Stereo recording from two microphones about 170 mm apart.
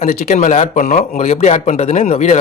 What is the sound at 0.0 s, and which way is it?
A man's voice, 40° left (ahead or behind).